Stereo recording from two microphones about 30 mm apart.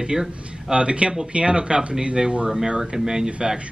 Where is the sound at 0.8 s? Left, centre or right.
Right.